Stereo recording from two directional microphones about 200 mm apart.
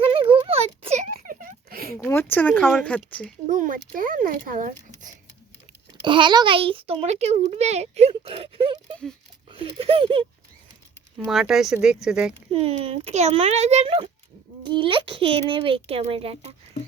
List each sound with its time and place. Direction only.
0.0 s a sound: 25° right (ahead or behind); by 2.0 s 50° right (ahead or behind)
2.0 s speech: 10° left (ahead or behind)
3.4 s speech: 40° right (ahead or behind)
6.0 s a child's voice: 25° right (ahead or behind)
11.3 s speech: centre (ahead or behind)
12.5 s a child's voice: 30° right (ahead or behind)